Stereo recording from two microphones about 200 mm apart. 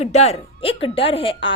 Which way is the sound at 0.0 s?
35° left (ahead or behind).